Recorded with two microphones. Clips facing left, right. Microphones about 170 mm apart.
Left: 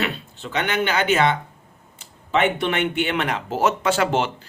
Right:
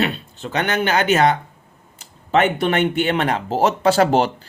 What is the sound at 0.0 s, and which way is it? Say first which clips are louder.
Speech: right 4 dB; 40° right (ahead or behind).